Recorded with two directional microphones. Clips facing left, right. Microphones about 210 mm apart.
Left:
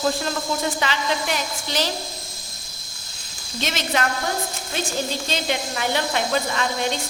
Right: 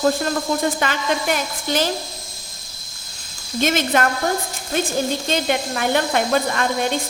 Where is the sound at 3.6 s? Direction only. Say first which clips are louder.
Right 6 dB; 50° right (ahead or behind).